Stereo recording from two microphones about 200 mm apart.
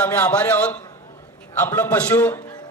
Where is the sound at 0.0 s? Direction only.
5° left (ahead or behind).